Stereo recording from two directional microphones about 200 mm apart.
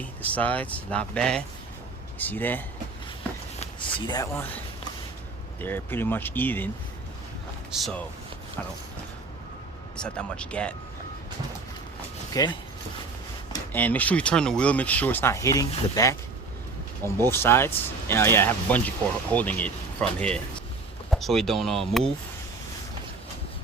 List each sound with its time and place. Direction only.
0.0 s speech: 5° left (ahead or behind)
3.6 s speech: 25° left (ahead or behind)
5.5 s speech: 10° left (ahead or behind)
7.7 s speech: centre (ahead or behind)
10.0 s speech: 5° left (ahead or behind)
12.3 s speech: 20° left (ahead or behind)
13.7 s speech: 10° left (ahead or behind)
17.2 s speech: 10° left (ahead or behind)